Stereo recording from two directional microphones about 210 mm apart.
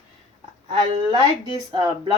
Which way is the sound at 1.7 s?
20° right (ahead or behind).